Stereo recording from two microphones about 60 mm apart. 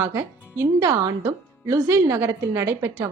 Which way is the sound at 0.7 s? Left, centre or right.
Right.